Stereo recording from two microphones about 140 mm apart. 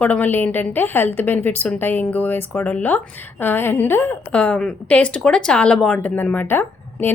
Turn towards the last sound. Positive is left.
turn(degrees=15)  # may be behind; listen again after turning